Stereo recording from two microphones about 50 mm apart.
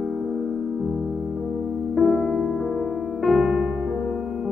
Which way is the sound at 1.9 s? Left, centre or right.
Centre.